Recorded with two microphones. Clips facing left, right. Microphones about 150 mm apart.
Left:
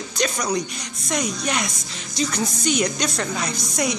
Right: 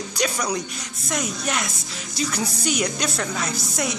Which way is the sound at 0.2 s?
10° right (ahead or behind).